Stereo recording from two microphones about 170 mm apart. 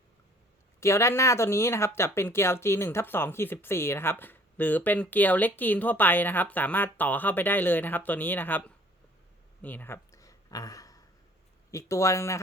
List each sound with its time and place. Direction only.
0.8 s speech: 15° left (ahead or behind)
9.6 s a sound: 10° left (ahead or behind)
11.7 s speech: 15° left (ahead or behind)